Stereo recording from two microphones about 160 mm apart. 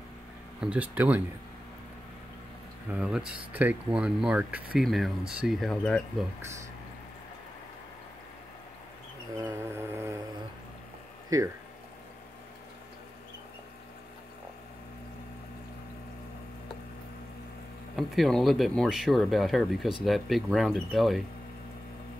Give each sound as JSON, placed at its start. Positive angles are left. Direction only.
{"t": 0.6, "sound": "speech", "side_deg": -10}
{"t": 2.9, "sound": "speech", "side_deg": -5}
{"t": 9.4, "sound": "vehicle", "side_deg": -15}
{"t": 11.2, "sound": "speech", "side_deg": -20}
{"t": 17.9, "sound": "speech", "side_deg": 0}